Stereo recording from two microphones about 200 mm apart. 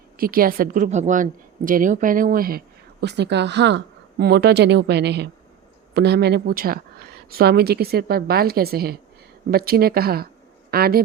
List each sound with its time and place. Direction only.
0.2 s a woman's voice: 45° right (ahead or behind)